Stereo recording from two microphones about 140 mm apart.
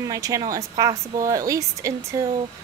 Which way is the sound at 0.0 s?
25° right (ahead or behind).